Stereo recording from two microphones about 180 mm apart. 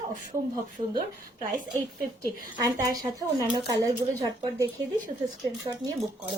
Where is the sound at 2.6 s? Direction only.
15° right (ahead or behind).